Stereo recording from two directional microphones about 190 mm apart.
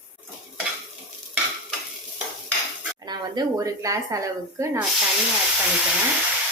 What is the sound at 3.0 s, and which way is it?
Speech, 20° right (ahead or behind).